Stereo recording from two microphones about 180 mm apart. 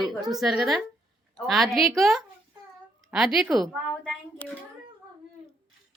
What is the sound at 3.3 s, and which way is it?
Speech, centre (ahead or behind).